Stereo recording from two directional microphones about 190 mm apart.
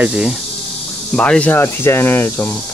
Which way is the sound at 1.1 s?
5° left (ahead or behind).